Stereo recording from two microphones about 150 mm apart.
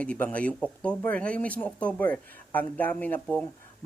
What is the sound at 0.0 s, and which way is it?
Speech, 10° left (ahead or behind).